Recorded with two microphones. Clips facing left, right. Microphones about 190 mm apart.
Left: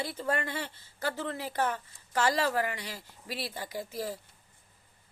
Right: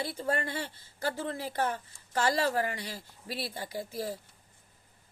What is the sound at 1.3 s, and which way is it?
Speech, 40° right (ahead or behind).